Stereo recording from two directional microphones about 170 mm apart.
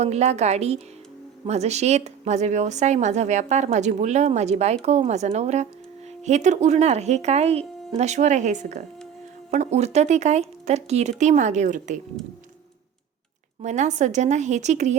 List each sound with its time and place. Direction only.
0.0 s speech: 40° right (ahead or behind)
13.6 s speech: 45° right (ahead or behind)